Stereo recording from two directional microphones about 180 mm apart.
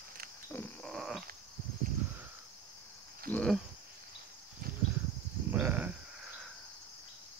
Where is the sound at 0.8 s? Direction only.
Centre (ahead or behind).